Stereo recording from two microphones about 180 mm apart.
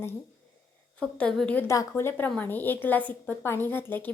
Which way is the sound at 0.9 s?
5° left (ahead or behind).